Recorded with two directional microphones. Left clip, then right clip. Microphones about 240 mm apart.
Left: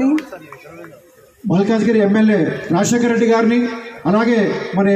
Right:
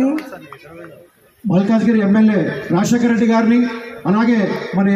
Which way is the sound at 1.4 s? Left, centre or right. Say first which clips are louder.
Left 1 dB; left.